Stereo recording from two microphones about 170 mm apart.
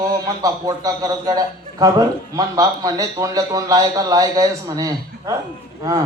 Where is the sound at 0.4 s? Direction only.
20° right (ahead or behind).